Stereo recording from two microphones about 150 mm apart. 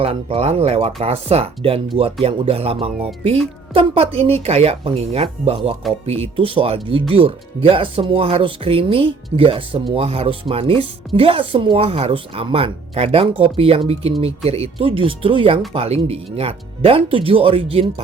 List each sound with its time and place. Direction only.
0.0 s speech: 40° right (ahead or behind)